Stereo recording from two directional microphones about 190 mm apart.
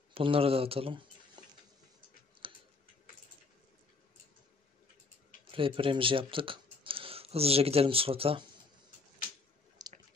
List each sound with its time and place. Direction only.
0.1 s speech: 30° right (ahead or behind)
2.4 s scissors: 25° right (ahead or behind)
5.5 s speech: 30° right (ahead or behind)
9.8 s chewing: 20° right (ahead or behind)